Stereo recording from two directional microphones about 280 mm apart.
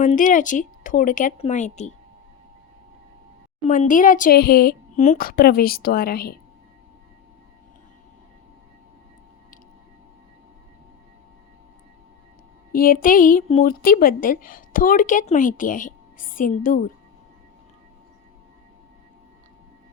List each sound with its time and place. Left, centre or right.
0.0 s a woman's voice: left
3.7 s a woman's voice: left
12.7 s a woman's voice: left